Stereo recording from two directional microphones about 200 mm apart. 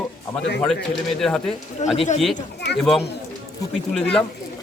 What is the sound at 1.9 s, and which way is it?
Speech, 35° left (ahead or behind).